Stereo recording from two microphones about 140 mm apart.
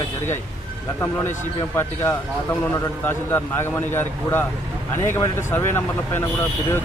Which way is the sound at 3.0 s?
15° left (ahead or behind).